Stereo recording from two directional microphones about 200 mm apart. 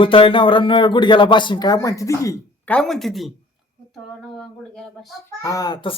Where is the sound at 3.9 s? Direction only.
Centre (ahead or behind).